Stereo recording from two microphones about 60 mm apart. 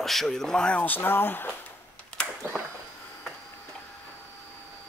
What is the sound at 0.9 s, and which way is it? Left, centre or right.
Speech, left.